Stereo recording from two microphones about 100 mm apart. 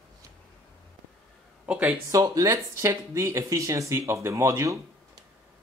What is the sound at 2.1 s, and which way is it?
Speech, 35° right (ahead or behind).